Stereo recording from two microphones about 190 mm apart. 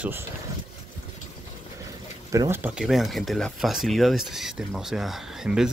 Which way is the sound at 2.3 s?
15° right (ahead or behind).